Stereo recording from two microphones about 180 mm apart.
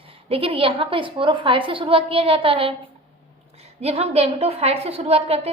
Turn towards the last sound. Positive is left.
turn(degrees=-35)  # may be behind; listen again after turning